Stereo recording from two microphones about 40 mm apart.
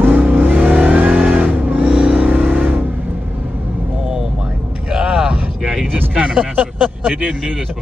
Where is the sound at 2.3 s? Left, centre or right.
Right.